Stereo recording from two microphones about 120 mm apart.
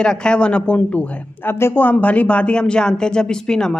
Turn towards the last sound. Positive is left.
turn(degrees=5)  # may be behind; listen again after turning